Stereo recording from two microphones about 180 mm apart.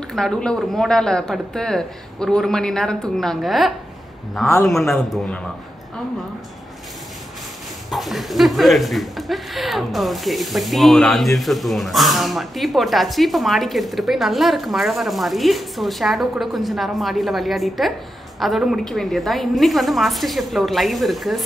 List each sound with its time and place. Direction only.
0.1 s speech: 5° left (ahead or behind)
7.9 s speech: centre (ahead or behind)